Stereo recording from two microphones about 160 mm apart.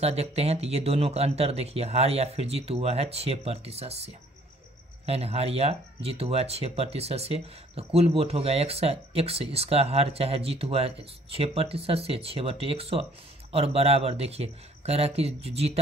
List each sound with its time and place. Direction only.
0.0 s speech: 40° right (ahead or behind)